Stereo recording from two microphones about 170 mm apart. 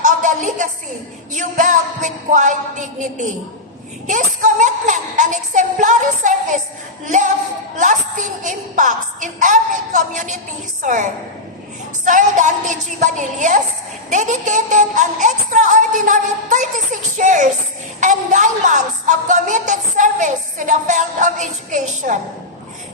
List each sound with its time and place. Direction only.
0.0 s a sound: 45° right (ahead or behind)
4.0 s a woman's voice: 50° right (ahead or behind)
7.8 s a woman's voice: 50° right (ahead or behind)